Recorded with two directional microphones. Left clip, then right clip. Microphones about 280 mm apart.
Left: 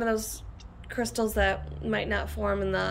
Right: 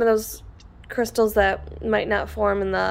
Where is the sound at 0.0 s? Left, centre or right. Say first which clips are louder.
Right 9 dB; centre.